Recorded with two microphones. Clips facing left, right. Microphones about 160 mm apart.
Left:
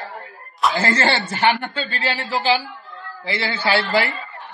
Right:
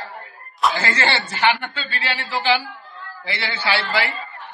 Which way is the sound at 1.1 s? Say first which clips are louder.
Left 1 dB; 45° left (ahead or behind).